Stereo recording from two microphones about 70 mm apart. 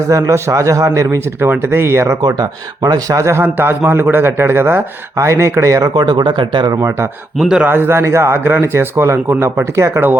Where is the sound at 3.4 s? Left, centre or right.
Right.